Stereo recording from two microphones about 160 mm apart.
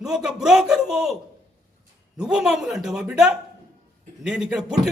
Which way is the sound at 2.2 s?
5° right (ahead or behind).